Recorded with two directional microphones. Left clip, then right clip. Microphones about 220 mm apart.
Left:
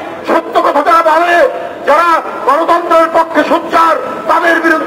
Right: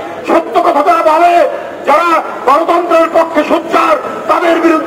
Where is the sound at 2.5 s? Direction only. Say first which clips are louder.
Even; 25° left (ahead or behind).